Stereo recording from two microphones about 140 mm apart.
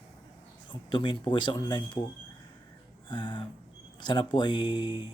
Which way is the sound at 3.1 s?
30° left (ahead or behind).